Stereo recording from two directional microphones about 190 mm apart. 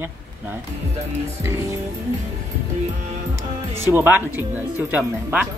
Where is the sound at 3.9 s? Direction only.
10° right (ahead or behind).